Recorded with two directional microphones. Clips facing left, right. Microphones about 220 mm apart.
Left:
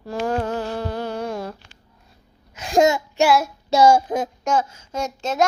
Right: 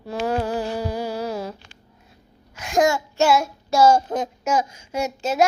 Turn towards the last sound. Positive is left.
turn(degrees=-10)  # may be behind; listen again after turning